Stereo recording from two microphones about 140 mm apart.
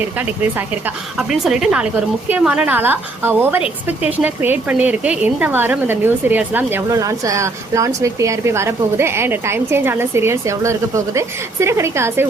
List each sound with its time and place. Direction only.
1.3 s a woman's voice: 5° right (ahead or behind)